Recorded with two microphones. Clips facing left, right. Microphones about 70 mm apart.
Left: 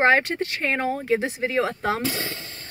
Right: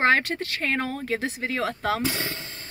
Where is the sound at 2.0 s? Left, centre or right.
Right.